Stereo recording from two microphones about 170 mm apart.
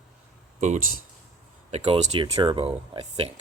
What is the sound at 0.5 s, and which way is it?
Speech, 45° right (ahead or behind).